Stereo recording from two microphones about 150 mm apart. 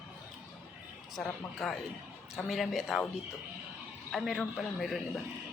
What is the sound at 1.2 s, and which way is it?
A man's voice, centre (ahead or behind).